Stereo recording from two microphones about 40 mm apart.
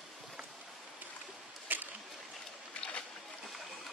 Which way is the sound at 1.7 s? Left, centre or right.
Right.